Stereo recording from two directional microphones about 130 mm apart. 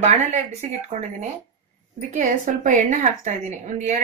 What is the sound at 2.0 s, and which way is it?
A woman's voice, 80° right.